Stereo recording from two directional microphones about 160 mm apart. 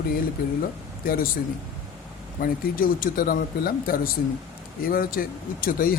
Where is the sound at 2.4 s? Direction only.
65° left (ahead or behind).